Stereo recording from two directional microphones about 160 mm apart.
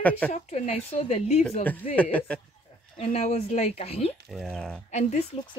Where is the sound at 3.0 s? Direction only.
40° left (ahead or behind).